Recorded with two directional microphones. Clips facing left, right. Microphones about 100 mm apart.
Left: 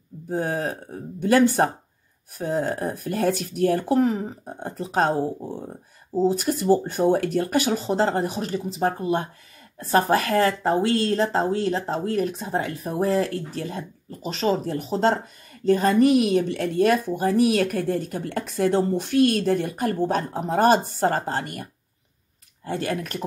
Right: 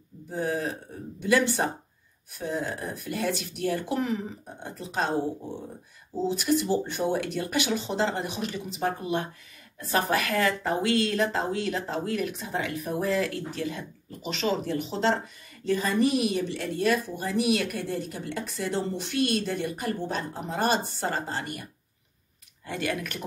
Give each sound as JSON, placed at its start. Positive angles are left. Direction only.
{"t": 0.3, "sound": "speech", "side_deg": 50}
{"t": 6.1, "sound": "speech", "side_deg": 40}
{"t": 22.7, "sound": "speech", "side_deg": 35}